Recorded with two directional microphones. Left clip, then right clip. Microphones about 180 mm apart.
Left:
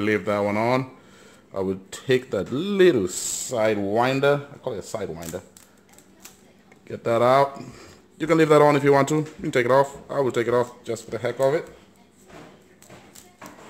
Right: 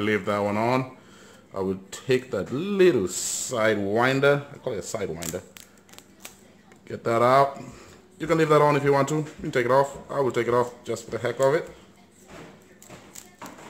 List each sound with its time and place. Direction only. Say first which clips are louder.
0.0 s speech: left 2 dB; 25° left (ahead or behind)
3.5 s speech: left 1 dB; 15° left (ahead or behind)
6.9 s speech: left 1 dB; 15° left (ahead or behind)